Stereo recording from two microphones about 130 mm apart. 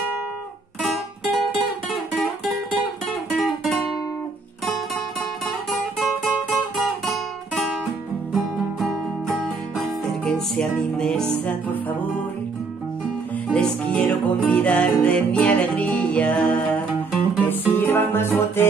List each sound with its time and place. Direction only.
1.9 s music: centre (ahead or behind)
8.3 s music: centre (ahead or behind)
13.5 s music: 5° left (ahead or behind)